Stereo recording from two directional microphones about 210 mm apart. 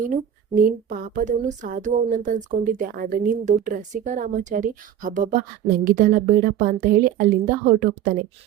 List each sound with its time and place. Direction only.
0.1 s speech: 40° right (ahead or behind)